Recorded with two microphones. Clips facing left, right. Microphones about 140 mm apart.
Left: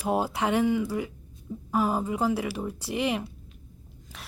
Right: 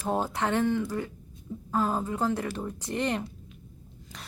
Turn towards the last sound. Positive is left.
turn(degrees=5)  # may be behind; listen again after turning